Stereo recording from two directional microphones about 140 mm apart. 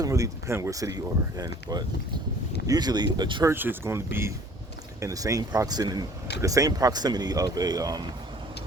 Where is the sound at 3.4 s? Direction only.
15° right (ahead or behind).